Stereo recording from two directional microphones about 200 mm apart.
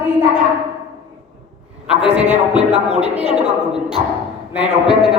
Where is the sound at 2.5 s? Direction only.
30° right (ahead or behind).